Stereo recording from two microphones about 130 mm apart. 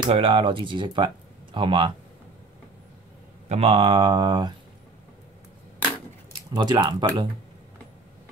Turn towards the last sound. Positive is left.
turn(degrees=-35)  # may be behind; listen again after turning